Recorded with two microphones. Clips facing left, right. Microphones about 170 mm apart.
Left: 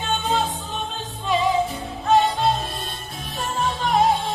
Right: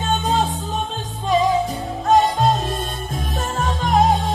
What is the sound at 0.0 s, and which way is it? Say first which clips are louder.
Music: right 3 dB; 40° right (ahead or behind).